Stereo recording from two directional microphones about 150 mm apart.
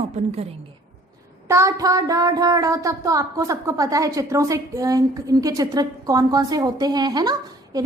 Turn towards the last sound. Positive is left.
turn(degrees=-25)  # may be behind; listen again after turning